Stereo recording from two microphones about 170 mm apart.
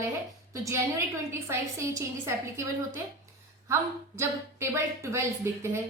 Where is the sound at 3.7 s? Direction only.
15° right (ahead or behind).